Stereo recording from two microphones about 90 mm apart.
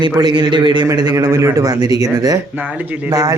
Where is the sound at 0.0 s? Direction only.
50° right (ahead or behind).